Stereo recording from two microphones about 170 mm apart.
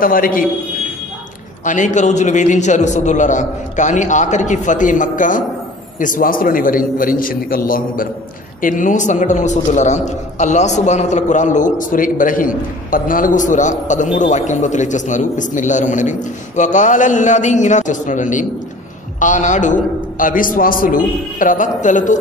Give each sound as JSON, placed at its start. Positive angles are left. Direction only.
{"t": 0.0, "sound": "a man's voice", "side_deg": 55}
{"t": 1.6, "sound": "a man's voice", "side_deg": 45}